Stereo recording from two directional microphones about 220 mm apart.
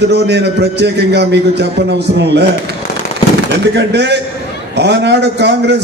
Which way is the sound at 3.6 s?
50° right (ahead or behind).